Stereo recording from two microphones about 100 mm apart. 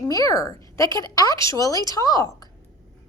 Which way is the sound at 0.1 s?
35° left (ahead or behind).